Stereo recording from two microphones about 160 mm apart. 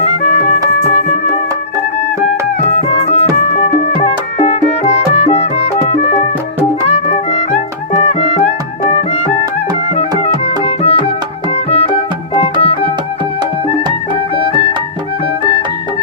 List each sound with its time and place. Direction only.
2.7 s music: 40° left (ahead or behind)
14.3 s music: 35° left (ahead or behind)